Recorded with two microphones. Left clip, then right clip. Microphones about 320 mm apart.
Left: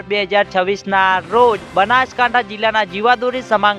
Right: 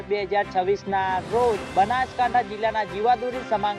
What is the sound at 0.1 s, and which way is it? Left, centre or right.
Speech, left.